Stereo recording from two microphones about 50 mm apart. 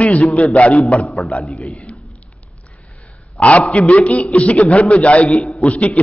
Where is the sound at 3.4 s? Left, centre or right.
Left.